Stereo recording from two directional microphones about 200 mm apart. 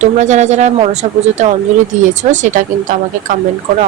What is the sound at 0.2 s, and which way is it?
Speech, 35° right (ahead or behind).